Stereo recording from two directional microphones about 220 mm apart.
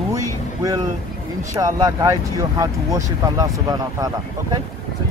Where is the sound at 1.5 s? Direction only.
15° right (ahead or behind).